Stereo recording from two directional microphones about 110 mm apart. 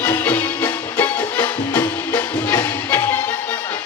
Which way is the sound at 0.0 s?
20° left (ahead or behind).